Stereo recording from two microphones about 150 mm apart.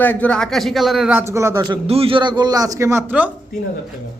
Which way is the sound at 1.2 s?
20° right (ahead or behind).